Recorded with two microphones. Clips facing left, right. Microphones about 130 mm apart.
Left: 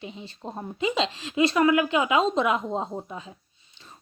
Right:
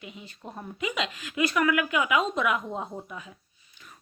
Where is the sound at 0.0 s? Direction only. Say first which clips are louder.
Left 5 dB; 30° left (ahead or behind).